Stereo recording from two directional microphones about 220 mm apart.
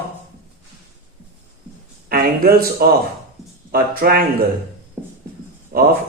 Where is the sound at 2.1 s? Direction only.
45° right (ahead or behind).